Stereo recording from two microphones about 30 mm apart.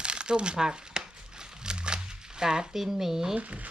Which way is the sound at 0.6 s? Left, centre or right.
Right.